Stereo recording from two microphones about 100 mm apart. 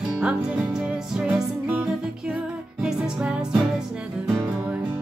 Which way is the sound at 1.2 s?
15° right (ahead or behind).